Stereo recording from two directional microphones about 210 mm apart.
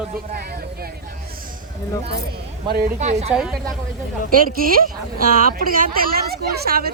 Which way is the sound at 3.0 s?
35° right (ahead or behind).